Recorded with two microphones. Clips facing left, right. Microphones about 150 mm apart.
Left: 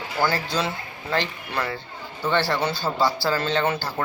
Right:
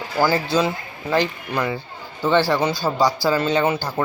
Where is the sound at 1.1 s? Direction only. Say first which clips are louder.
Right 5 dB; 15° right (ahead or behind).